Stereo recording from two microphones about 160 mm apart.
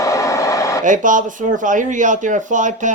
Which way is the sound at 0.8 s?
55° right (ahead or behind).